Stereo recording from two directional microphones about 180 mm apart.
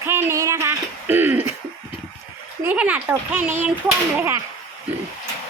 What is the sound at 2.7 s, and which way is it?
Speech, 10° right (ahead or behind).